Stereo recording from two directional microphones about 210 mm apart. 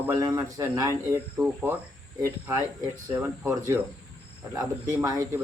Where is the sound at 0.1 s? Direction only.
15° right (ahead or behind).